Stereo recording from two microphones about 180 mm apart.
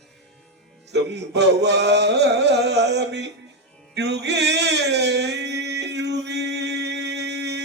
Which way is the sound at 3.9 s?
70° right (ahead or behind).